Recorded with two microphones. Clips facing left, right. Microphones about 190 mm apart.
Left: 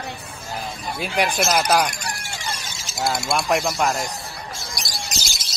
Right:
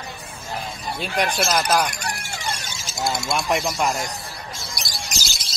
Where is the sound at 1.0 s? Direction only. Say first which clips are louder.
Left 1 dB; 10° left (ahead or behind).